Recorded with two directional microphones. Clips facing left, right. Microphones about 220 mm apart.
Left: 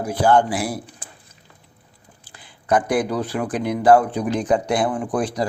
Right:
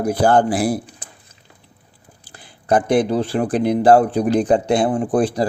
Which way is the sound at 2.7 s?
25° right (ahead or behind).